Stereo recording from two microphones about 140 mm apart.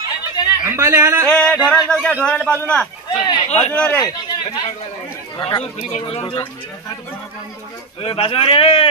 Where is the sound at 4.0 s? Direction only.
30° left (ahead or behind).